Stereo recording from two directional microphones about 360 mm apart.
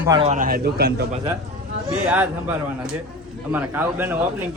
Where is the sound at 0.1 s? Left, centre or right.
Centre.